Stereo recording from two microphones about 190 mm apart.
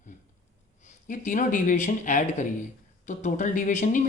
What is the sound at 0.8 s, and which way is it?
Speech, 40° left (ahead or behind).